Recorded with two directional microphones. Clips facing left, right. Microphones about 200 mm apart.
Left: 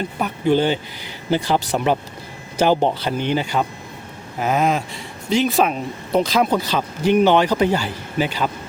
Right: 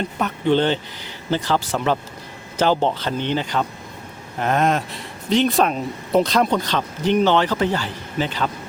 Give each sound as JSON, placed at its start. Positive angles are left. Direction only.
{"t": 0.2, "sound": "speech", "side_deg": 10}